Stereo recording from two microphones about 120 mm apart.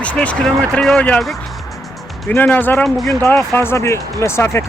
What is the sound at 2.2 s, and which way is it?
Speech, 15° left (ahead or behind).